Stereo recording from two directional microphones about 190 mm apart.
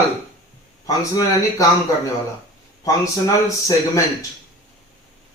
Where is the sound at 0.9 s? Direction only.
20° left (ahead or behind).